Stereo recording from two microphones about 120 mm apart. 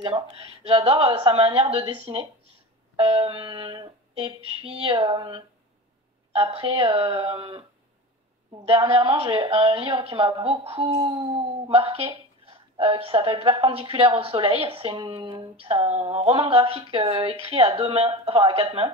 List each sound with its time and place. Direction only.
0.7 s speech: 45° right (ahead or behind)
6.3 s speech: 55° right (ahead or behind)
8.6 s speech: 55° right (ahead or behind)